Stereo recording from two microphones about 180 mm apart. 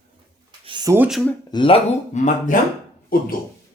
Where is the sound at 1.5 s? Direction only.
30° left (ahead or behind).